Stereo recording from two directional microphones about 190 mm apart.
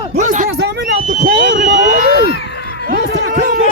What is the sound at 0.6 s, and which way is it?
Speech, 60° right (ahead or behind).